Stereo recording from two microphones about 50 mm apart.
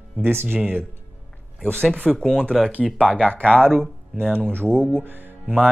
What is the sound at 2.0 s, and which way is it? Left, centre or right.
Speech, centre.